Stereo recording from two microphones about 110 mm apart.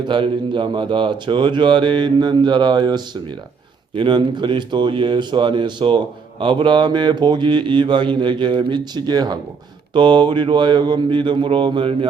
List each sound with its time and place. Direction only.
0.1 s speech: 50° right (ahead or behind)